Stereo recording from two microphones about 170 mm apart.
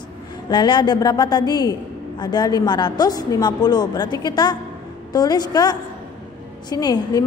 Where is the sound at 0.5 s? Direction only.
25° left (ahead or behind).